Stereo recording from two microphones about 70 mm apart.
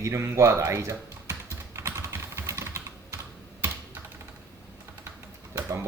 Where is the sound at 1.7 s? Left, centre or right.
Right.